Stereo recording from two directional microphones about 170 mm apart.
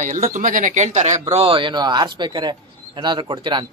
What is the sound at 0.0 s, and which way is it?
Speech, 50° right (ahead or behind).